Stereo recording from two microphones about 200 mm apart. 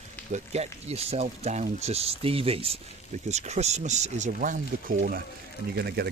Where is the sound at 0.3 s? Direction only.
35° right (ahead or behind).